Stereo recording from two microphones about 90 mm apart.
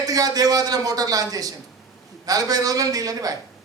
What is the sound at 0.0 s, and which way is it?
Speech, 40° right (ahead or behind).